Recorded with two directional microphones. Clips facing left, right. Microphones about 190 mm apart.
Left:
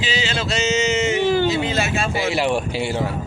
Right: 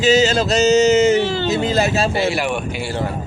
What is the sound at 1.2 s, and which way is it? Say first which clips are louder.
Speech: left 2 dB; 15° left (ahead or behind).